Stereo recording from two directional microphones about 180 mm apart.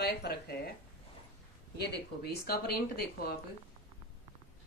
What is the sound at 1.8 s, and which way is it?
Speech, 65° left (ahead or behind).